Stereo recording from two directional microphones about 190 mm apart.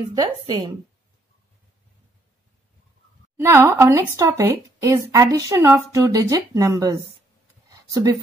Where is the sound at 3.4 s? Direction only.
15° right (ahead or behind).